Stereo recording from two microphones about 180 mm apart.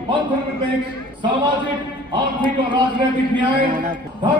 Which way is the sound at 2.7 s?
25° right (ahead or behind).